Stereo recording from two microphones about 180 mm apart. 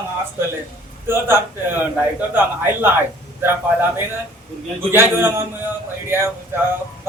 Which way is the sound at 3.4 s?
10° right (ahead or behind).